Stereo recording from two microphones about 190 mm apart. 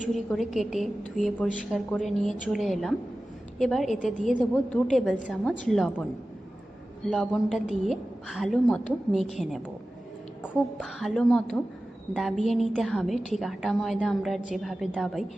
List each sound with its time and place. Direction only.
0.1 s a woman's voice: centre (ahead or behind)
3.9 s a woman's voice: 40° left (ahead or behind)
4.3 s a woman's voice: 5° left (ahead or behind)